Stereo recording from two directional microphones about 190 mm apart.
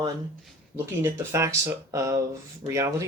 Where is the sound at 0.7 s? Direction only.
15° right (ahead or behind).